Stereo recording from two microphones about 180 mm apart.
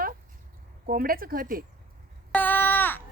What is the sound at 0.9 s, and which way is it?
Speech, 55° right (ahead or behind).